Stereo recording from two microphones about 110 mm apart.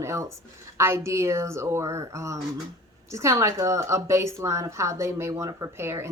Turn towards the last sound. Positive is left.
turn(degrees=-25)  # may be behind; listen again after turning